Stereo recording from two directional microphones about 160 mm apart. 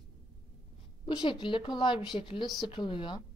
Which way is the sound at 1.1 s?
30° left (ahead or behind).